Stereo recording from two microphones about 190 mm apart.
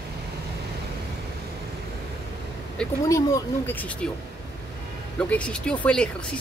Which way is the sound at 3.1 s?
15° left (ahead or behind).